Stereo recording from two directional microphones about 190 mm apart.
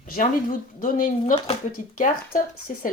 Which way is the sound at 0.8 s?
50° left (ahead or behind).